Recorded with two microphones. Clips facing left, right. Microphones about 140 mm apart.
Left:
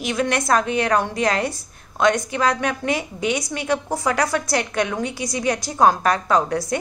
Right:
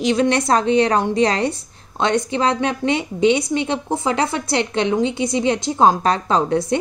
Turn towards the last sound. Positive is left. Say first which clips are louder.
# right 2 dB
turn(degrees=-25)  # may be behind; listen again after turning